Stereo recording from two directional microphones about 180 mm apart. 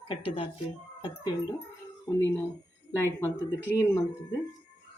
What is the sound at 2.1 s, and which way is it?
Speech, 15° left (ahead or behind).